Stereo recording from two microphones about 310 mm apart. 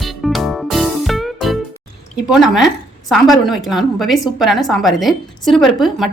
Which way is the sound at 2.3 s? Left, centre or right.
Centre.